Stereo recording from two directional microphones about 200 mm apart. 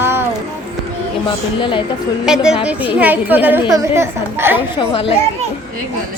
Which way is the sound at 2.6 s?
5° right (ahead or behind).